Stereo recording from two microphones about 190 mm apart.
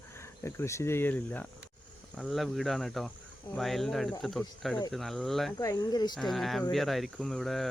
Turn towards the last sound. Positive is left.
turn(degrees=0)  # may be behind; listen again after turning